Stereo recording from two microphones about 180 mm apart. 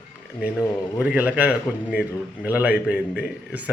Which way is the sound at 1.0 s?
5° right (ahead or behind).